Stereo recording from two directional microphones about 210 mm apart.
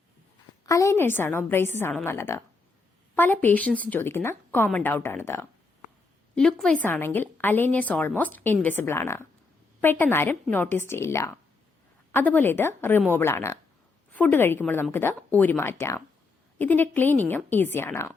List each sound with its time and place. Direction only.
0.6 s a woman's voice: 15° left (ahead or behind)